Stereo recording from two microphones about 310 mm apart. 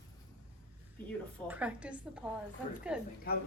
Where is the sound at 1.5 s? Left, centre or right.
Centre.